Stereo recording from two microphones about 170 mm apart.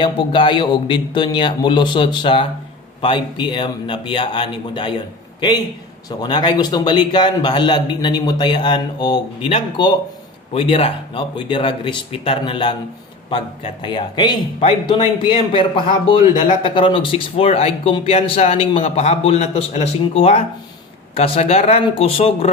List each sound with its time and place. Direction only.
0.0 s a man's voice: 30° left (ahead or behind)
13.8 s a man's voice: 25° left (ahead or behind)